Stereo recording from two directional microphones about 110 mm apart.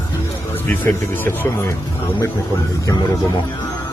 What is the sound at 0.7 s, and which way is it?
Speech, 20° left (ahead or behind).